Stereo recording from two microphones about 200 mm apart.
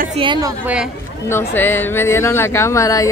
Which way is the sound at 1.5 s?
10° left (ahead or behind).